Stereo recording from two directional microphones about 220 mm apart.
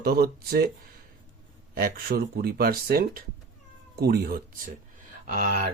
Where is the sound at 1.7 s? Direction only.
45° right (ahead or behind).